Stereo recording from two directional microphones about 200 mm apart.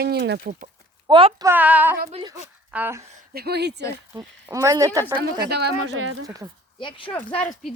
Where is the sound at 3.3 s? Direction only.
50° right (ahead or behind).